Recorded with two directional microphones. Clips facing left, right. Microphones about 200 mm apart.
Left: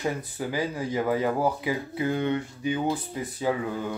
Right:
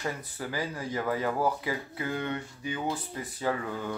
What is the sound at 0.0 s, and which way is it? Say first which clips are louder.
Speech: left 5 dB; 15° left (ahead or behind).